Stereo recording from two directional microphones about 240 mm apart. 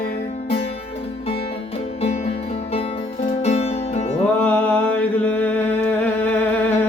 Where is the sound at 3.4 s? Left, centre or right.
Left.